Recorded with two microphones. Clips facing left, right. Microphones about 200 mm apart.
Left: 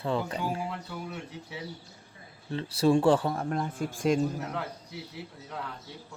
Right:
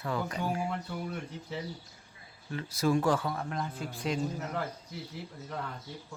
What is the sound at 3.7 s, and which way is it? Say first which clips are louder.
Speech: left 10 dB; 50° left (ahead or behind).